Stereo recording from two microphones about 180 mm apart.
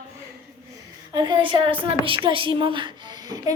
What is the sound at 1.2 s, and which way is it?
A woman's voice, 25° right (ahead or behind).